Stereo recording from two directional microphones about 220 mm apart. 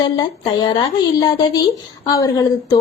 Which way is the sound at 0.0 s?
20° left (ahead or behind).